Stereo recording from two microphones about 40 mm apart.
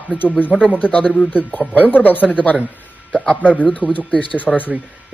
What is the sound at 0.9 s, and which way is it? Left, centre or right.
Speech, left.